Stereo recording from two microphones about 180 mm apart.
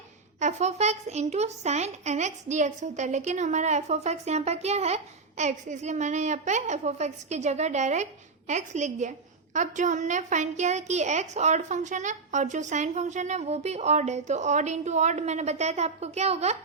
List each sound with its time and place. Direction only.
0.3 s a woman's voice: 40° right (ahead or behind)